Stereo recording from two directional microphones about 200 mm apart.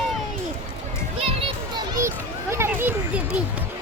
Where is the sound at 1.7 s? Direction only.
15° right (ahead or behind).